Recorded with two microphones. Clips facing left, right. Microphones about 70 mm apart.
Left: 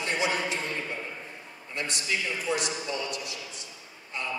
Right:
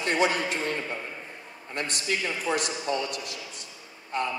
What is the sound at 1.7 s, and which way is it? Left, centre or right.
A man's voice, right.